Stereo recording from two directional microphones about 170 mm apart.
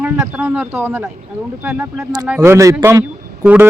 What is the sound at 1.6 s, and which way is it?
Speech, centre (ahead or behind).